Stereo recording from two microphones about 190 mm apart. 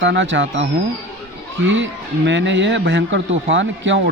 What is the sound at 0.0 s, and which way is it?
A man's voice, 70° right (ahead or behind).